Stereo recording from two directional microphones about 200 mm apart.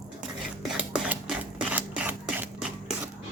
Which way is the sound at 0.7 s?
5° right (ahead or behind).